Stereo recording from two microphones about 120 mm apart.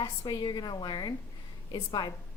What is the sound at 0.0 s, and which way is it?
A woman's voice, 35° left (ahead or behind).